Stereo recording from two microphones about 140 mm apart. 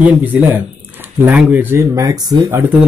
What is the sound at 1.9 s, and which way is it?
Speech, 25° right (ahead or behind).